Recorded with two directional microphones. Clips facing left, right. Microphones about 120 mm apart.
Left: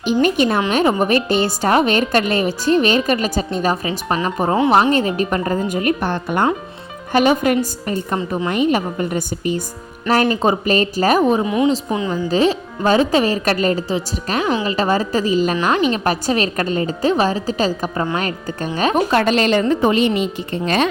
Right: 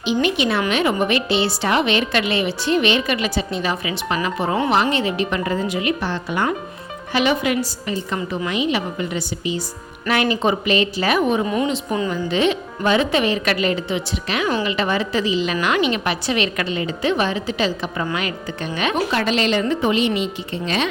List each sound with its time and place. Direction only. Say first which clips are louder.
0.0 s a woman's voice: left 4 dB; 45° left (ahead or behind)
10.1 s a woman's voice: left 3 dB; 40° left (ahead or behind)
11.4 s a woman's voice: left 4 dB; 15° left (ahead or behind)
12.3 s a woman's voice: left 4 dB; 35° left (ahead or behind)